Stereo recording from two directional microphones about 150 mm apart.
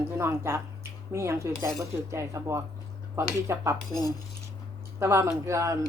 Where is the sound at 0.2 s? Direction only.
15° right (ahead or behind).